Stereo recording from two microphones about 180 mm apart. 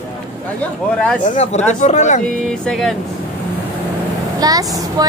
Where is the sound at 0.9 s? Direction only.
5° left (ahead or behind).